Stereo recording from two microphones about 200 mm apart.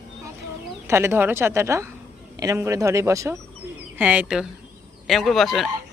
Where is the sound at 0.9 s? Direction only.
15° right (ahead or behind).